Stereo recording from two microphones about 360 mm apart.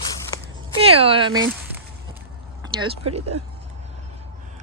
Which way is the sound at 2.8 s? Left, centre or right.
Centre.